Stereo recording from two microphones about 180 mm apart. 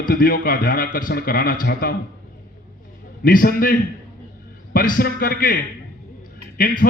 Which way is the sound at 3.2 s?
50° left (ahead or behind).